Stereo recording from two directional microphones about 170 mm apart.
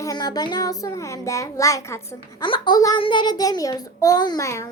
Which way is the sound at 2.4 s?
25° left (ahead or behind).